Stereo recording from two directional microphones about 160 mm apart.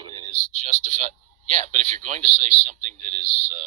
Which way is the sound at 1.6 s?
50° right (ahead or behind).